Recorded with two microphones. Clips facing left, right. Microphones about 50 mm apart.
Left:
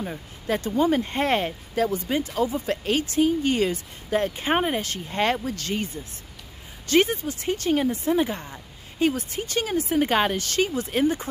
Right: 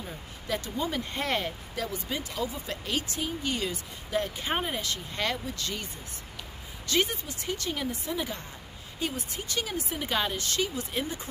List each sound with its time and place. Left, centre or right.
0.0 s speech: left
5.4 s speech: left
6.9 s speech: left
9.0 s speech: left